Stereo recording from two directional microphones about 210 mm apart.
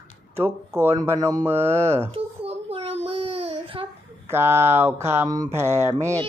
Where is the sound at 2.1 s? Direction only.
30° right (ahead or behind).